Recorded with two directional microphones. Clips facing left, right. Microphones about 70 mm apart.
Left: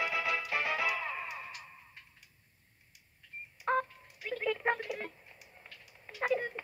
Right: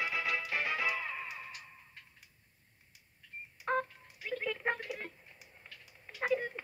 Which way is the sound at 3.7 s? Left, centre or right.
Centre.